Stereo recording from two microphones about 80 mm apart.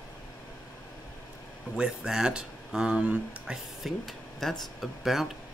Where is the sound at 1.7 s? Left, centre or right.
Centre.